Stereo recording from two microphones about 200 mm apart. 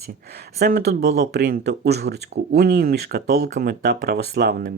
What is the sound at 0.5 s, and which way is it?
Speech, 50° right (ahead or behind).